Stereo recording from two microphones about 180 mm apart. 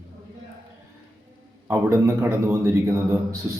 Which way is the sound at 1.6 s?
15° right (ahead or behind).